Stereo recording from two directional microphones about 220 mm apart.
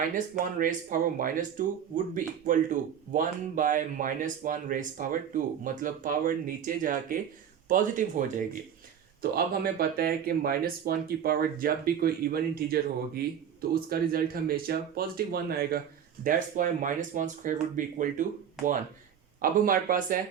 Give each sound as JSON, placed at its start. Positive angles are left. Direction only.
{"t": 0.6, "sound": "speech", "side_deg": -40}
{"t": 9.3, "sound": "speech", "side_deg": -45}
{"t": 19.4, "sound": "speech", "side_deg": -40}